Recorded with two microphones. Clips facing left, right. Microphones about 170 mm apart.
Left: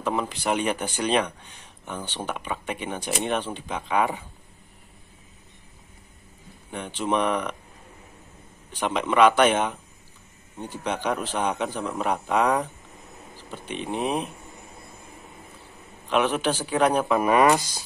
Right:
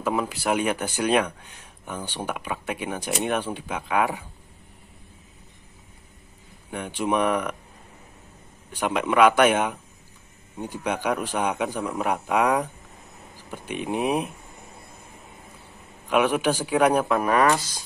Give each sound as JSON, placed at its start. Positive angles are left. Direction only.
{"t": 0.0, "sound": "speech", "side_deg": -5}
{"t": 6.7, "sound": "speech", "side_deg": -10}
{"t": 8.7, "sound": "speech", "side_deg": -10}
{"t": 16.1, "sound": "speech", "side_deg": -10}